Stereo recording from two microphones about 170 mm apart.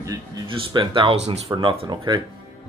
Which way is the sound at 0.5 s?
30° right (ahead or behind).